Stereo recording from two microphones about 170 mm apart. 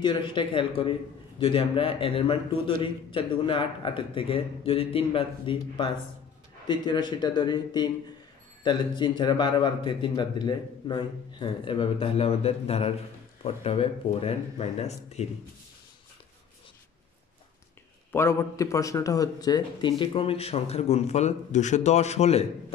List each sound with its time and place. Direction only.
0.0 s a man's voice: 30° left (ahead or behind)
18.1 s a man's voice: 15° left (ahead or behind); by 22.5 s 40° left (ahead or behind)